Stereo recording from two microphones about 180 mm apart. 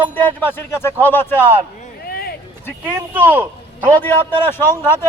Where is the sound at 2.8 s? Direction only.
10° right (ahead or behind).